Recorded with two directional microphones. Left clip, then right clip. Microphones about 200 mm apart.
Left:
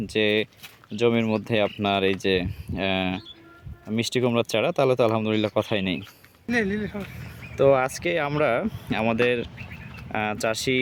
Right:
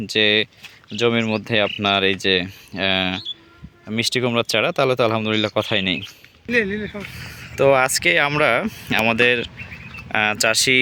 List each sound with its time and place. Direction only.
0.0 s speech: centre (ahead or behind)
6.5 s speech: 65° left (ahead or behind)
7.2 s speech: centre (ahead or behind)